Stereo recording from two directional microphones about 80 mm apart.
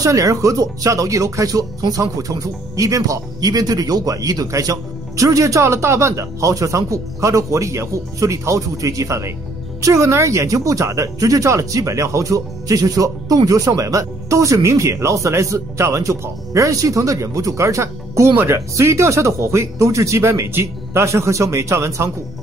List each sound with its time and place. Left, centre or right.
0.0 s speech: right
18.3 s speech: right
18.8 s speech: right